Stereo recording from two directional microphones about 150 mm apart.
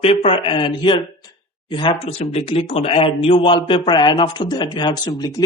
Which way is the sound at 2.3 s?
45° left (ahead or behind).